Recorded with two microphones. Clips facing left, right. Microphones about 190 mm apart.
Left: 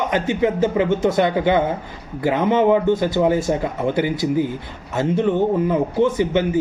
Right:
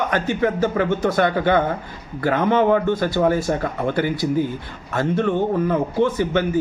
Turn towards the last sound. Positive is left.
turn(degrees=20)  # may be behind; listen again after turning